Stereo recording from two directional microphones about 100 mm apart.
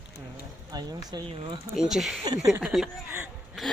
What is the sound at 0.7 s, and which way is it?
Speech, 40° right (ahead or behind).